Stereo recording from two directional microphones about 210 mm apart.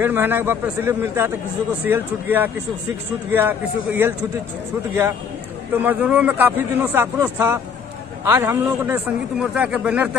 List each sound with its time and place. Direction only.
0.0 s a man's voice: 10° right (ahead or behind)
5.7 s a man's voice: 10° right (ahead or behind)